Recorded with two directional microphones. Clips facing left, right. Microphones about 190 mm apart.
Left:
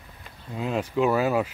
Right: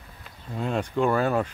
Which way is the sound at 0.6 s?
5° left (ahead or behind).